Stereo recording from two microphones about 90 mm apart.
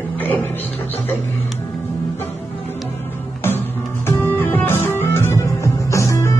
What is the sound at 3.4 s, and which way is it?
Music, 25° left (ahead or behind).